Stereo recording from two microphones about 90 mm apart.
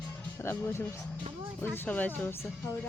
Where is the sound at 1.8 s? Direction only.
15° left (ahead or behind).